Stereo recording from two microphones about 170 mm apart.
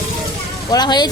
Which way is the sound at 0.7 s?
25° left (ahead or behind).